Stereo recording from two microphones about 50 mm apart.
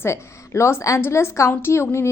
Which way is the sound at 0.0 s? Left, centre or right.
Left.